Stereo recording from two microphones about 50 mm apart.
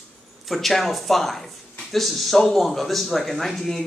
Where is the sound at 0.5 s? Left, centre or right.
Centre.